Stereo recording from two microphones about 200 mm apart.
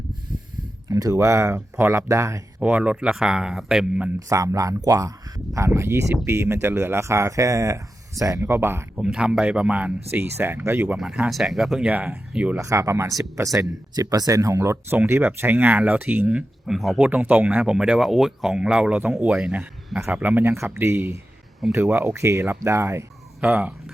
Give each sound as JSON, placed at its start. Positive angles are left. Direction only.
{"t": 0.9, "sound": "speech", "side_deg": -15}
{"t": 4.3, "sound": "speech", "side_deg": -15}